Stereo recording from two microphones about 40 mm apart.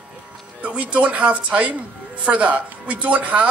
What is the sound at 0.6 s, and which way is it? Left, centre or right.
Speech, right.